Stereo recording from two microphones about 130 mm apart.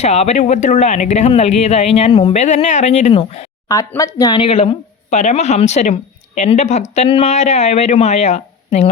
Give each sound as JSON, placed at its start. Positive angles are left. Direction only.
{"t": 0.0, "sound": "speech", "side_deg": 60}
{"t": 3.1, "sound": "speech", "side_deg": 50}
{"t": 3.7, "sound": "speech", "side_deg": 25}
{"t": 4.4, "sound": "speech", "side_deg": 50}